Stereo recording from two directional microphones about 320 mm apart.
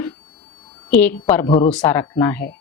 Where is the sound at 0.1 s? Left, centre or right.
Centre.